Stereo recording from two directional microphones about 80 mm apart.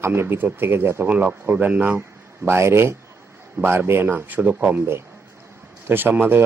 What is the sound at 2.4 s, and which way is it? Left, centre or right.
A man's voice, right.